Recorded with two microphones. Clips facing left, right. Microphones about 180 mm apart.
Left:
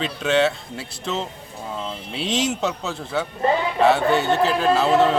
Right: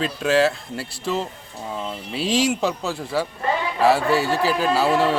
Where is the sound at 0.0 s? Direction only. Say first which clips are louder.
Right 1 dB; 5° right (ahead or behind).